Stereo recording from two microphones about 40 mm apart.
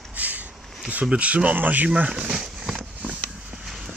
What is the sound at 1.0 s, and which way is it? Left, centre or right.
Speech, right.